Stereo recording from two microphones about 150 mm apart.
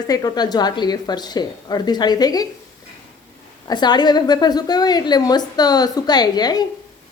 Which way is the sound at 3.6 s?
30° left (ahead or behind).